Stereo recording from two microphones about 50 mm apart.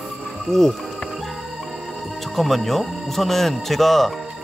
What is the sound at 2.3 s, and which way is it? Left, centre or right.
Speech, centre.